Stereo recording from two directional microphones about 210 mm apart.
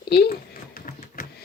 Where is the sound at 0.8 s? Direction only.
40° left (ahead or behind).